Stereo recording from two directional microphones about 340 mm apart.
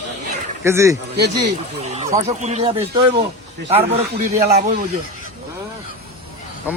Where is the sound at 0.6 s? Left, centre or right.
Centre.